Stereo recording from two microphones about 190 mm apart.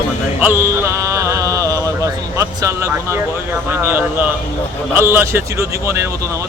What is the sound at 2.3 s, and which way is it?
Speech, 15° right (ahead or behind).